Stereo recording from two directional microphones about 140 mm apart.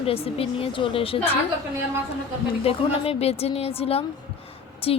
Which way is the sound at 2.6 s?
45° left (ahead or behind).